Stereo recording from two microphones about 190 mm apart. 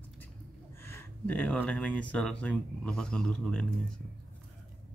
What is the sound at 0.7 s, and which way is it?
Speech, 10° left (ahead or behind).